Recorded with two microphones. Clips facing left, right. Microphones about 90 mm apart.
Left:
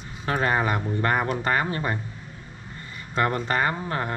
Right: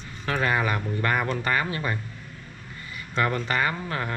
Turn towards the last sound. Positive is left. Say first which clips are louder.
# left 2 dB
turn(degrees=15)  # may be behind; listen again after turning